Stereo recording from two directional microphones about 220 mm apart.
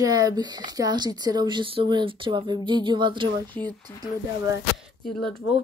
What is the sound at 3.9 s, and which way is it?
Speech, 10° left (ahead or behind).